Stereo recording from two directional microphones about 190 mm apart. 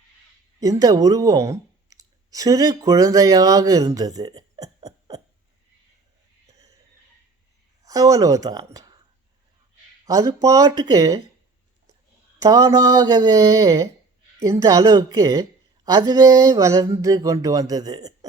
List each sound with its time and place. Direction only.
0.6 s a woman's voice: 20° right (ahead or behind)
6.5 s a sound: 15° right (ahead or behind)
7.9 s speech: 20° right (ahead or behind)
10.1 s speech: 20° right (ahead or behind)
12.4 s a woman's voice: 20° right (ahead or behind)